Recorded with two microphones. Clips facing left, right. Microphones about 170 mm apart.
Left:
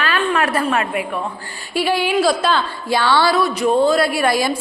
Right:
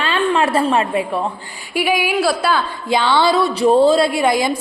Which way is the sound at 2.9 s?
20° right (ahead or behind).